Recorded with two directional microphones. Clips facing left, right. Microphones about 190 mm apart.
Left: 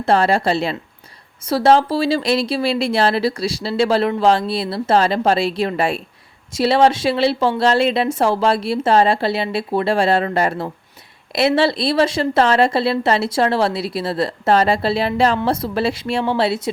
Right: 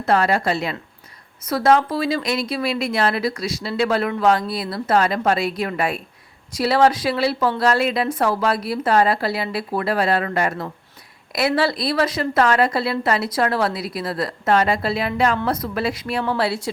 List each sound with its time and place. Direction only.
0.0 s speech: 30° left (ahead or behind)